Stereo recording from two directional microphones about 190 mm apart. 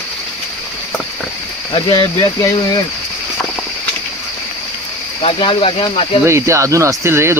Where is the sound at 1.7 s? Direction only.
20° left (ahead or behind).